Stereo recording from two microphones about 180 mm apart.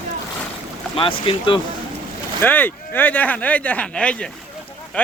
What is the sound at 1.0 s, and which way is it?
Speech, 30° left (ahead or behind).